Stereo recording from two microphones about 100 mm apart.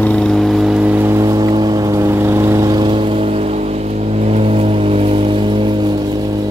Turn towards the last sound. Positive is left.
turn(degrees=-55)  # may be behind; listen again after turning